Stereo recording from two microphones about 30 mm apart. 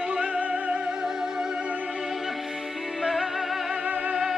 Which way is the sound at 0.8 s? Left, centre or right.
Centre.